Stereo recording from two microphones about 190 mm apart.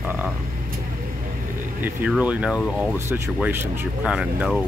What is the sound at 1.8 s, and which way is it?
Speech, 5° right (ahead or behind).